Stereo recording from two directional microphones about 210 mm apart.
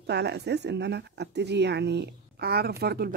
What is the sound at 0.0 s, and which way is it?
A woman's voice, 50° right (ahead or behind).